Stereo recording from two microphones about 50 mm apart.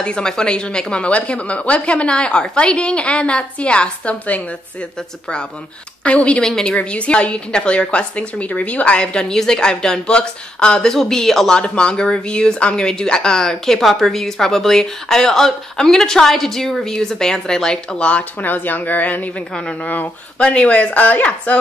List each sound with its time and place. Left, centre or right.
0.0 s a woman's voice: centre
6.0 s a woman's voice: left; by 11.6 s centre
11.6 s speech: left
18.4 s speech: left
19.5 s a woman's voice: centre